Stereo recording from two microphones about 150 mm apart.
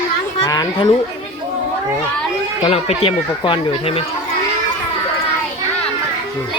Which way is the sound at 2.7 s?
40° left (ahead or behind).